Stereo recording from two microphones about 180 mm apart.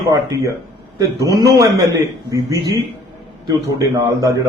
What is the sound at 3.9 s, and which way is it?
Speech, 20° right (ahead or behind).